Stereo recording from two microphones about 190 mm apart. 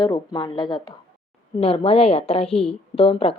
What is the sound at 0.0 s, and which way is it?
A woman's voice, 20° left (ahead or behind).